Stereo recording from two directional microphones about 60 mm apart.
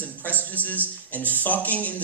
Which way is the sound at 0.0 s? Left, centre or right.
Left.